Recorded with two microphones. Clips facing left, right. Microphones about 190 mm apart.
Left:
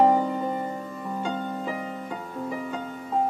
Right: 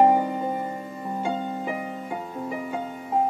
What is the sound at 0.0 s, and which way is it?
Music, 15° right (ahead or behind).